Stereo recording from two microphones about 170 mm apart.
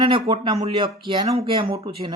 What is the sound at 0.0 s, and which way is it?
Speech, 30° right (ahead or behind).